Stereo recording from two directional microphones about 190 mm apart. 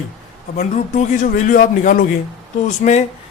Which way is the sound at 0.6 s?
40° left (ahead or behind).